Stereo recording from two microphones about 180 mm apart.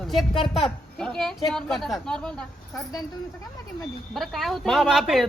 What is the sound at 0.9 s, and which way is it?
Speech, 5° left (ahead or behind).